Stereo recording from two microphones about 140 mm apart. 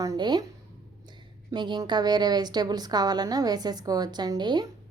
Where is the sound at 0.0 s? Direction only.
25° right (ahead or behind).